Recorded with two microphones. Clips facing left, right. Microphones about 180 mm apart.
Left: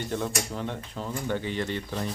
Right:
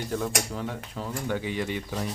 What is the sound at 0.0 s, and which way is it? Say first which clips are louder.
Speech: right 1 dB; centre (ahead or behind).